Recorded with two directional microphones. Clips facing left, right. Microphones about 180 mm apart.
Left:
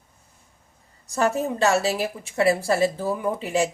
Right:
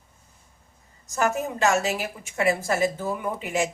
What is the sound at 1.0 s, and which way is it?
A woman's voice, 35° left (ahead or behind).